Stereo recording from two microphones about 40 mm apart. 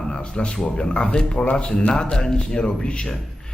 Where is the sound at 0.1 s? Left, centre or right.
Left.